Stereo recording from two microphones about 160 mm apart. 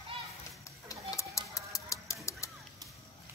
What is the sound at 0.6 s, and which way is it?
Tick-tock, 20° left (ahead or behind).